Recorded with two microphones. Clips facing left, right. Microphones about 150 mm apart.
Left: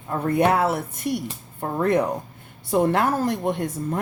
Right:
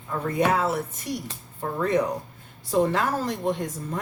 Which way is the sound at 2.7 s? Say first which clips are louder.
Left 3 dB; 60° left (ahead or behind).